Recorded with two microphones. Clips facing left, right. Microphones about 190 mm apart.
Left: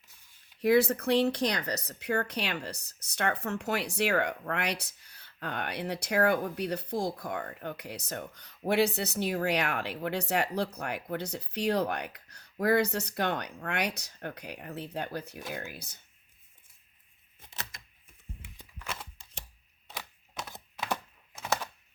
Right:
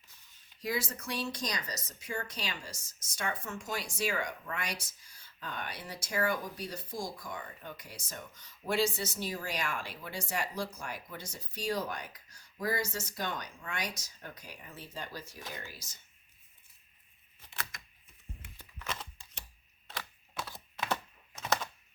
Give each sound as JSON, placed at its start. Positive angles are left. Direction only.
{"t": 0.6, "sound": "speech", "side_deg": 60}
{"t": 18.5, "sound": "a sound", "side_deg": 10}
{"t": 19.9, "sound": "computer keyboard", "side_deg": 20}